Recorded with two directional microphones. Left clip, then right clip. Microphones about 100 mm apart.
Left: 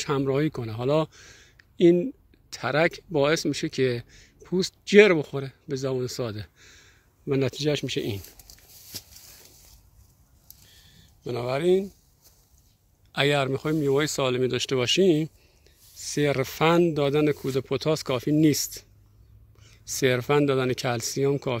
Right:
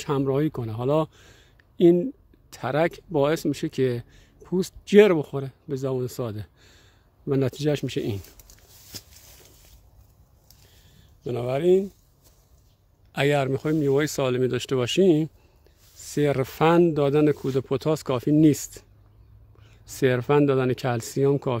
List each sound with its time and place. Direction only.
0.0 s speech: 35° right (ahead or behind); by 8.2 s 60° right (ahead or behind)
11.2 s speech: 50° right (ahead or behind)
13.1 s speech: 70° right (ahead or behind)